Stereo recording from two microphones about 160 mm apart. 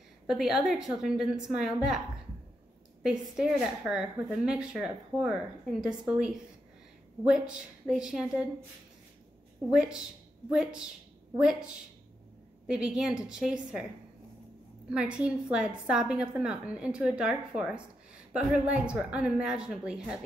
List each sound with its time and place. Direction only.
0.3 s speech: 5° right (ahead or behind)
3.0 s speech: 5° right (ahead or behind)
9.7 s speech: 5° right (ahead or behind)
14.9 s speech: 5° right (ahead or behind)